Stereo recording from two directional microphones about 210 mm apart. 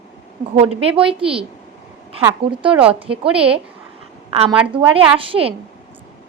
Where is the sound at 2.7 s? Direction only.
25° right (ahead or behind).